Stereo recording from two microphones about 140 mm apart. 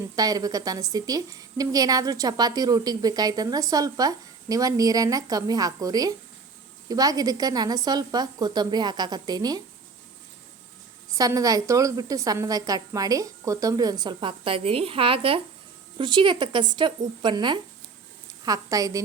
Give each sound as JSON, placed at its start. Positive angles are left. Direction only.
{"t": 0.2, "sound": "a woman's voice", "side_deg": -25}
{"t": 11.2, "sound": "a woman's voice", "side_deg": -25}